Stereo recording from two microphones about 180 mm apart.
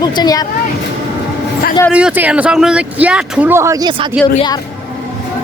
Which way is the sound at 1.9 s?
10° right (ahead or behind).